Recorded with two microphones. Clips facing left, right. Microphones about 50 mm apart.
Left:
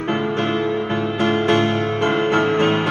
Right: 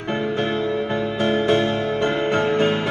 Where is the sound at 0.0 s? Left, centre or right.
Left.